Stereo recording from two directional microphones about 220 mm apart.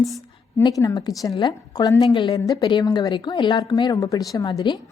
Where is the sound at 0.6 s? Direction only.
15° left (ahead or behind).